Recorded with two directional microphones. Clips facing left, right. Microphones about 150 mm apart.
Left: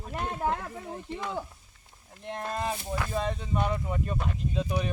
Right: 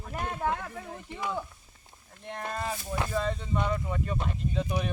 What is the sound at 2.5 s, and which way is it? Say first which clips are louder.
Speech: left 2 dB; 20° left (ahead or behind).